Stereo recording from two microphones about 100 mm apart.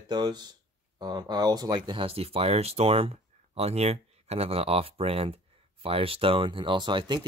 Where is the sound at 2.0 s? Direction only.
70° right (ahead or behind).